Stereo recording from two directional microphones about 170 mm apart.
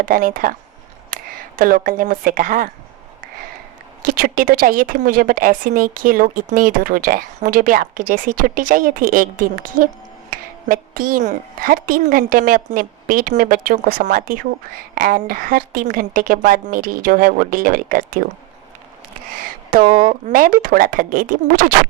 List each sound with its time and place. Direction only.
0.0 s speech: 50° right (ahead or behind)
4.0 s a woman's voice: 55° right (ahead or behind)
19.7 s a woman's voice: 55° right (ahead or behind)